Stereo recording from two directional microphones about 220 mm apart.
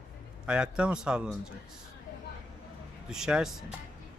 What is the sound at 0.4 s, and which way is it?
Speech, 5° right (ahead or behind).